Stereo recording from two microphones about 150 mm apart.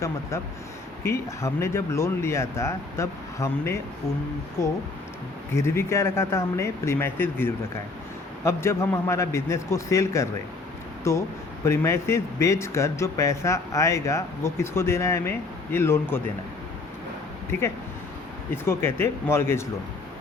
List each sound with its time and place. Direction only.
0.0 s speech: 20° left (ahead or behind)
17.5 s speech: 15° left (ahead or behind)